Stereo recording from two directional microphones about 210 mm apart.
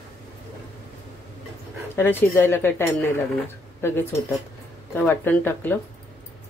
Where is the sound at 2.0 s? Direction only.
10° left (ahead or behind).